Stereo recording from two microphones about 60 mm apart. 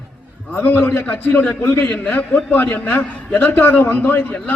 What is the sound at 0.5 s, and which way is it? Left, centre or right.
A man's voice, left.